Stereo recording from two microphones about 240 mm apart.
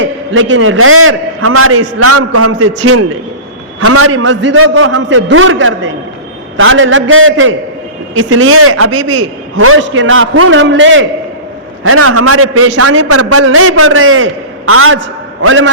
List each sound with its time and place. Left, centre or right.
0.0 s a man's voice: right
3.8 s a man's voice: right
11.8 s a man's voice: right